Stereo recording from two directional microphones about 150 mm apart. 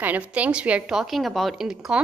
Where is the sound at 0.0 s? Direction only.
10° right (ahead or behind).